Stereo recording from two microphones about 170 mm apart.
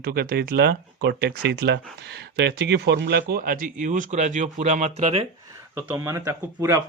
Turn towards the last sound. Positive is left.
turn(degrees=-20)  # may be behind; listen again after turning